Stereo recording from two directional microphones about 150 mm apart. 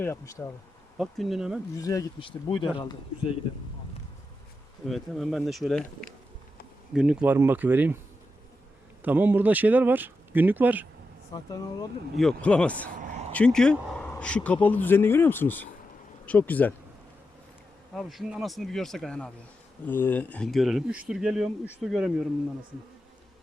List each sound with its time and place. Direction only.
0.0 s speech: 20° left (ahead or behind)
0.9 s speech: centre (ahead or behind)
1.8 s speech: 20° left (ahead or behind)
2.1 s speech: 35° left (ahead or behind)
4.9 s speech: centre (ahead or behind)
6.9 s speech: 5° right (ahead or behind)
9.0 s speech: 10° right (ahead or behind)
11.3 s speech: 25° left (ahead or behind)
12.1 s speech: 5° left (ahead or behind)
13.0 s a sound: 55° right (ahead or behind)
13.3 s speech: 5° left (ahead or behind)
17.9 s speech: centre (ahead or behind)